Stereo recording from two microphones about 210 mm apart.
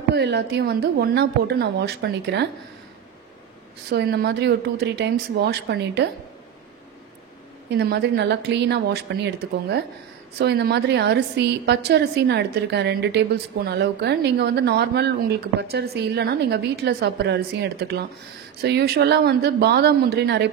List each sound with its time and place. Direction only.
0.1 s speech: 55° right (ahead or behind)
3.9 s speech: 50° right (ahead or behind)
7.7 s speech: 55° right (ahead or behind)